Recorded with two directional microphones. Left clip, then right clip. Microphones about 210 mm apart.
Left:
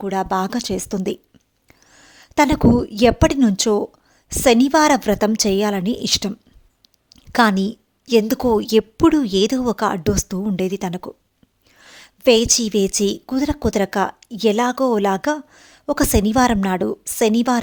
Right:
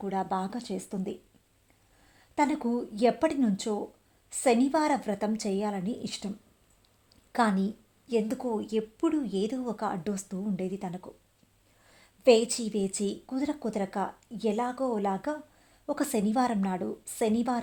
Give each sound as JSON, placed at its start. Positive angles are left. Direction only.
{"t": 0.0, "sound": "a woman's voice", "side_deg": 35}